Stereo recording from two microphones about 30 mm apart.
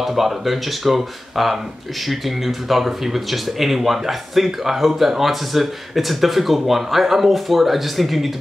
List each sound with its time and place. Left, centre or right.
0.0 s speech: centre